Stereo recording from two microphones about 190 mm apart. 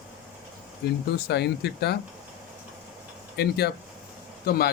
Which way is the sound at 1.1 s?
60° left (ahead or behind).